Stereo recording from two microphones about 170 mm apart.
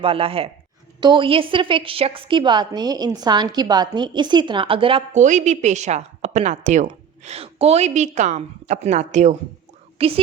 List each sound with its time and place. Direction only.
0.0 s a man's voice: 35° right (ahead or behind)
5.2 s a man's voice: 45° right (ahead or behind)